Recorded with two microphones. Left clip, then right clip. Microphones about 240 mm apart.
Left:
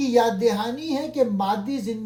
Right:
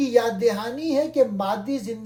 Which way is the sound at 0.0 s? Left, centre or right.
Left.